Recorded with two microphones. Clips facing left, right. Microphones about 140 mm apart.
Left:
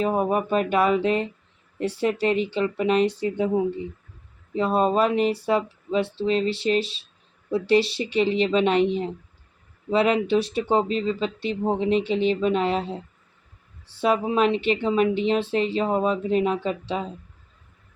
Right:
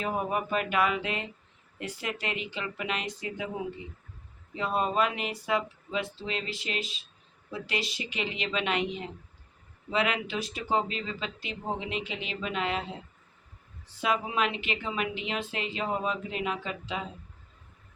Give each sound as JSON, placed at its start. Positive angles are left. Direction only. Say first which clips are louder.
{"t": 0.0, "sound": "a woman's voice", "louder": "left 8 dB", "side_deg": 35}